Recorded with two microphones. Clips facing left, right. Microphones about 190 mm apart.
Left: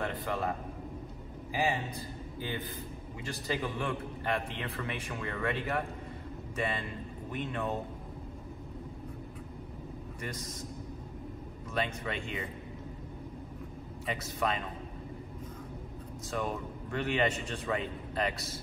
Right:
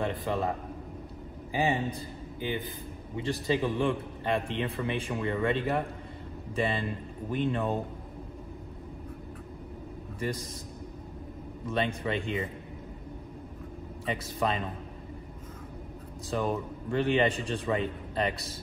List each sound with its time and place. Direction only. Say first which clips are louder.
0.0 s a man's voice: right 4 dB; 20° right (ahead or behind)
1.5 s a man's voice: right 4 dB; 20° right (ahead or behind)
10.2 s a man's voice: right 8 dB; 30° right (ahead or behind)
11.7 s a man's voice: right 5 dB; 25° right (ahead or behind)
14.0 s a man's voice: right 3 dB; 30° right (ahead or behind)
16.3 s a man's voice: right 5 dB; 30° right (ahead or behind)